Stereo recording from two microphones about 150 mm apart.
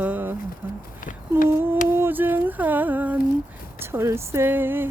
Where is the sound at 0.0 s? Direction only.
10° right (ahead or behind).